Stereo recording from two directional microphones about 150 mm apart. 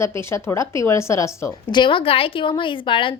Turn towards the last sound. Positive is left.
turn(degrees=35)  # may be behind; listen again after turning